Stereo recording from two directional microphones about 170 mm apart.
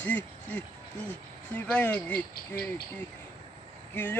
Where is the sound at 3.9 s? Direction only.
10° left (ahead or behind).